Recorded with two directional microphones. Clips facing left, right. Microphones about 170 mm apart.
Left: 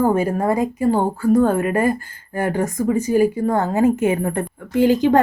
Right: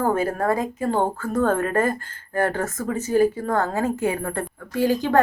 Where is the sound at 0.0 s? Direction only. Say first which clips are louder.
Left 4 dB; 15° left (ahead or behind).